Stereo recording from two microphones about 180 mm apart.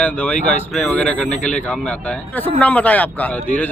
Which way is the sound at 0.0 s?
10° left (ahead or behind).